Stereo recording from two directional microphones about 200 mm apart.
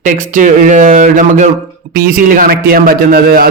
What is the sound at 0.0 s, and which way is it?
Speech, 40° right (ahead or behind).